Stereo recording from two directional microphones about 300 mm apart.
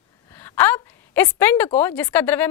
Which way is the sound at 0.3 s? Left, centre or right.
Centre.